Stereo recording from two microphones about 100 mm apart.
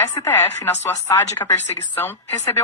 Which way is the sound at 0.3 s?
20° left (ahead or behind).